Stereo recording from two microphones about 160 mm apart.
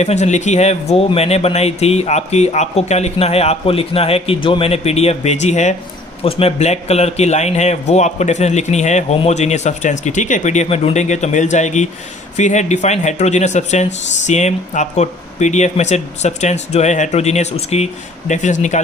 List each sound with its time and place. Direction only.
0.0 s speech: 45° left (ahead or behind)